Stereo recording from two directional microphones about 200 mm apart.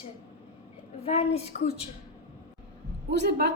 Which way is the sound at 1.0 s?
30° left (ahead or behind).